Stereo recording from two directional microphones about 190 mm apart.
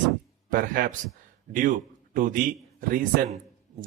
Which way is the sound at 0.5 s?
50° right (ahead or behind).